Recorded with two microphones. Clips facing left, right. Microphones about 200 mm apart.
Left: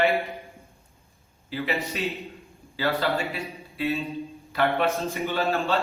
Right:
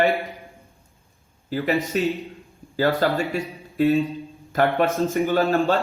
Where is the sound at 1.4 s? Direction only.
45° right (ahead or behind).